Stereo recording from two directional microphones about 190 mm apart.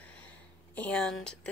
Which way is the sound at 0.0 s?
5° left (ahead or behind).